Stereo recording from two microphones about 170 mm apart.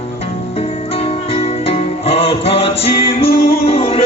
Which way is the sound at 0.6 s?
35° left (ahead or behind).